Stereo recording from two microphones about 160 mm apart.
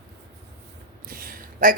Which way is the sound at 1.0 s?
65° right (ahead or behind).